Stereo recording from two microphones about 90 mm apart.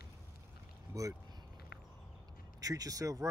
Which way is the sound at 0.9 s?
40° right (ahead or behind).